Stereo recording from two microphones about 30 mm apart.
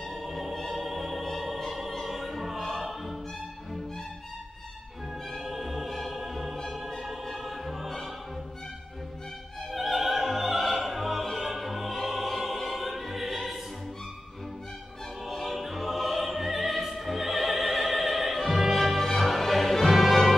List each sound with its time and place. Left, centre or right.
0.1 s music: centre
2.0 s opera: centre
2.7 s music: centre
5.4 s music: centre
9.7 s music: centre
15.2 s music: centre